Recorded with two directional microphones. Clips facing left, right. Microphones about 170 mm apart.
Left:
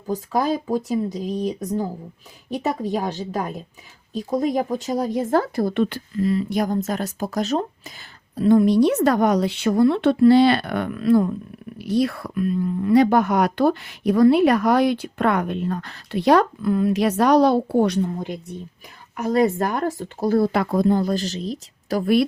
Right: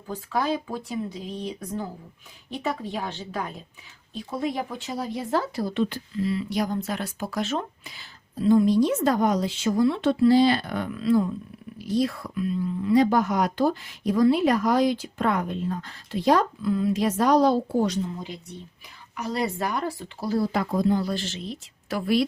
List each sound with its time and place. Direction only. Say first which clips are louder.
0.1 s speech: left 5 dB; 40° left (ahead or behind)
8.4 s speech: left 4 dB; 65° left (ahead or behind); by 22.1 s 40° left (ahead or behind)